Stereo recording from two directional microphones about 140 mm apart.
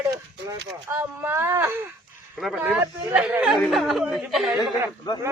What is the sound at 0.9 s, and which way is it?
Speech, 20° right (ahead or behind).